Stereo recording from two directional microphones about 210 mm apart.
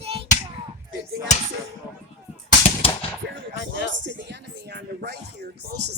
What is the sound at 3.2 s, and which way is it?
Gunshot, 55° right (ahead or behind).